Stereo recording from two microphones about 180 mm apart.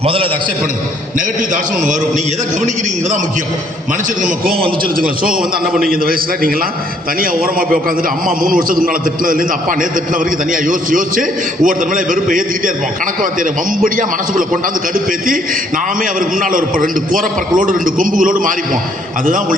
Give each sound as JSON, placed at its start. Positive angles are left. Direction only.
{"t": 0.0, "sound": "a man's voice", "side_deg": -30}
{"t": 1.4, "sound": "a man's voice", "side_deg": -45}
{"t": 4.5, "sound": "a man's voice", "side_deg": -30}
{"t": 4.9, "sound": "a man's voice", "side_deg": -55}